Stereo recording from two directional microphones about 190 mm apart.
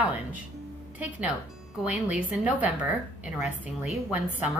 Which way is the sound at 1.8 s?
5° right (ahead or behind).